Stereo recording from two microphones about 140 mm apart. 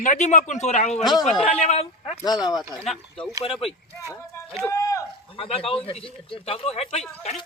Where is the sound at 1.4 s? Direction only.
50° left (ahead or behind).